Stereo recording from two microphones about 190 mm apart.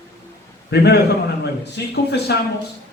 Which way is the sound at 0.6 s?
60° left (ahead or behind).